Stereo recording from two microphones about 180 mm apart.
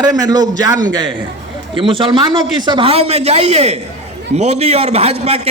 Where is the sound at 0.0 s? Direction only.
20° right (ahead or behind).